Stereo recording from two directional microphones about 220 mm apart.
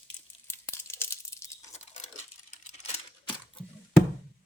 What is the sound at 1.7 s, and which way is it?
Crumpling, 30° left (ahead or behind).